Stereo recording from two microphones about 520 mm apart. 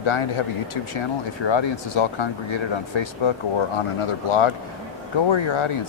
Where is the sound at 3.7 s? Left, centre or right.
Left.